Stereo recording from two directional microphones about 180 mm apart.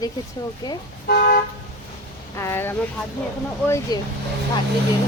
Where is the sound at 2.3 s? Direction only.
15° left (ahead or behind).